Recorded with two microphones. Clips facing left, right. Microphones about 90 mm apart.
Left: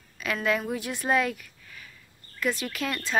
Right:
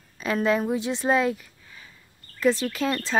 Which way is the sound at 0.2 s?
30° right (ahead or behind).